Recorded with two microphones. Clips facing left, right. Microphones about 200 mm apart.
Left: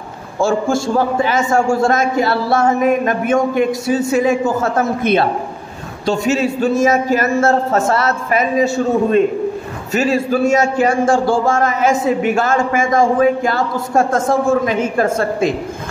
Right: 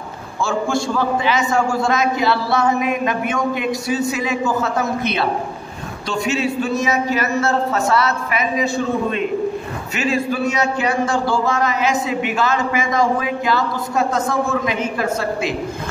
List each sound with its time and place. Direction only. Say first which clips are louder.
0.4 s a man's voice: left 5 dB; 45° left (ahead or behind)